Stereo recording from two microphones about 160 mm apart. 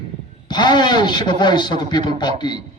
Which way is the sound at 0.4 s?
25° left (ahead or behind).